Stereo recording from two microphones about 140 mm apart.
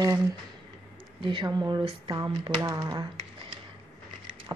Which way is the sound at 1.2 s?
35° right (ahead or behind).